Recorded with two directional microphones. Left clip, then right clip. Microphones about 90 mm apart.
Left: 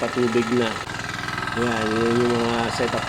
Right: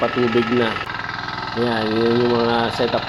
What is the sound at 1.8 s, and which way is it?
Speech, 40° left (ahead or behind).